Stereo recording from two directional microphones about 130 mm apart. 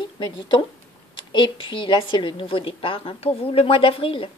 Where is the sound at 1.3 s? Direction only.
40° left (ahead or behind).